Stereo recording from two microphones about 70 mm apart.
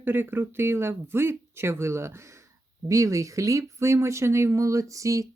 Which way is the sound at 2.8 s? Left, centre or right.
Right.